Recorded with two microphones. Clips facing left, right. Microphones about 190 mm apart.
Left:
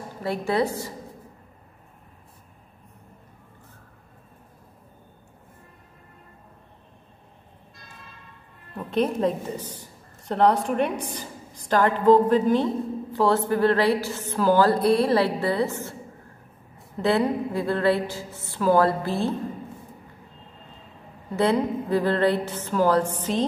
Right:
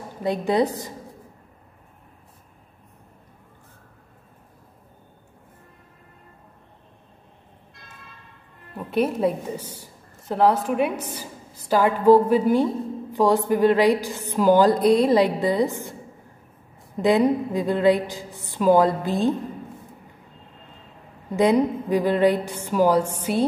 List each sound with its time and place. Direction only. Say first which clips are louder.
0.2 s a woman's voice: right 3 dB; 20° right (ahead or behind)
8.7 s a woman's voice: right 1 dB; 10° right (ahead or behind)
21.3 s a woman's voice: right 3 dB; 15° right (ahead or behind)